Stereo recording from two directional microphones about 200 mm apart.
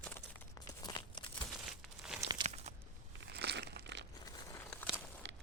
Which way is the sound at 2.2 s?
30° right (ahead or behind).